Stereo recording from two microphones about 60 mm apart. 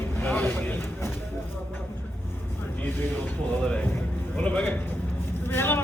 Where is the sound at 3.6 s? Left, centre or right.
Centre.